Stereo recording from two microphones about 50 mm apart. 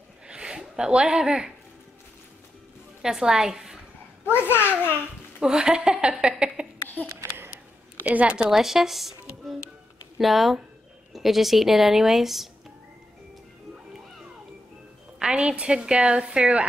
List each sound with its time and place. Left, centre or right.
0.3 s a sound: centre
3.0 s a woman's voice: centre
4.3 s a child's voice: left
5.4 s a woman's voice: centre
7.2 s a sound: right
8.0 s a woman's voice: right
8.5 s a woman's voice: centre
15.1 s a woman's voice: centre